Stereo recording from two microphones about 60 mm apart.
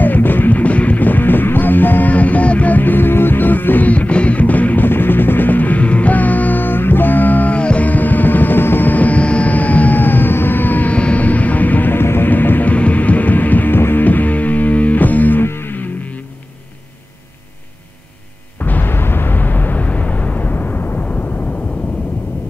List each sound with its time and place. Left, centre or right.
0.0 s music: left
15.4 s music: left
18.6 s a sound: left